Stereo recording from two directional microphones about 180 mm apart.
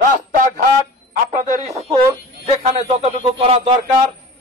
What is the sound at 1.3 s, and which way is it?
Speech, 45° right (ahead or behind).